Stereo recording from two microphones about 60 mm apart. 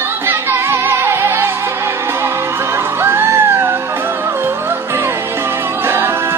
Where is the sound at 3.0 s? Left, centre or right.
Right.